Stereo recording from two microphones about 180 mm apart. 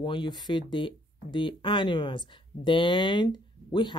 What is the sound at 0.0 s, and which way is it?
Speech, 25° left (ahead or behind).